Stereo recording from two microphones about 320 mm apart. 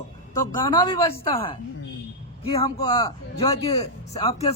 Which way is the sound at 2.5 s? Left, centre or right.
Centre.